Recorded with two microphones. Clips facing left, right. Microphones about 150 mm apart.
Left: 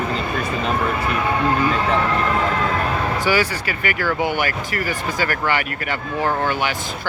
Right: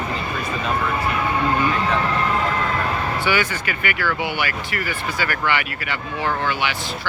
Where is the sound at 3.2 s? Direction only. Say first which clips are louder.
Left 2 dB; 35° left (ahead or behind).